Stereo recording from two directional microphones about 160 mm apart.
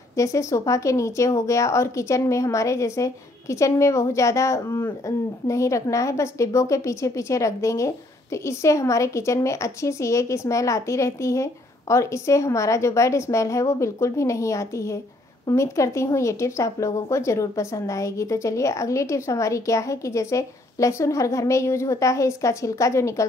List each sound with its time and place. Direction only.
0.2 s speech: 20° left (ahead or behind)